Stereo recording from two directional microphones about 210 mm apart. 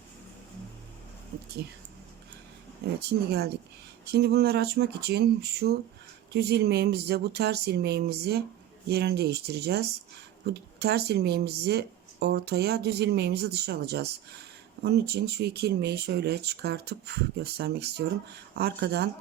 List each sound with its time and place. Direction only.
3.1 s speech: 50° right (ahead or behind)